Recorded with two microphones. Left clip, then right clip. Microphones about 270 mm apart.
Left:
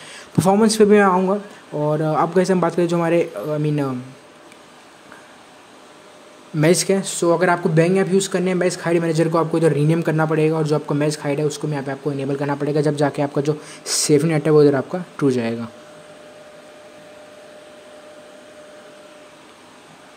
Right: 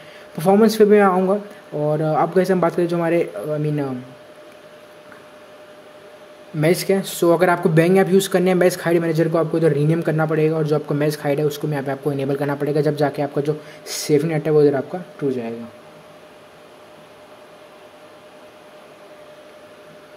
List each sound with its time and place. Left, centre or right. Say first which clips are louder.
0.4 s speech: right 1 dB; centre
6.5 s speech: left 1 dB; centre
15.1 s speech: left 4 dB; left